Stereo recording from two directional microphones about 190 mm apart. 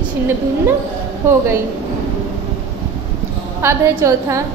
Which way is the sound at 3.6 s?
15° right (ahead or behind).